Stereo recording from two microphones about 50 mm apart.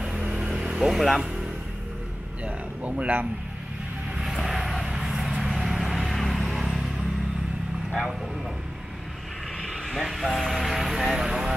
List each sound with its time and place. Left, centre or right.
0.0 s vehicle: centre
0.7 s speech: centre
2.4 s a sound: right
4.4 s vehicle: centre
4.8 s a sound: centre
5.6 s vehicle: centre
9.6 s vehicle: centre